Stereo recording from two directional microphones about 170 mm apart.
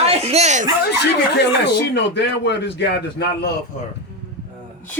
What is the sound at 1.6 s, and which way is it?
A man's voice, 90° left.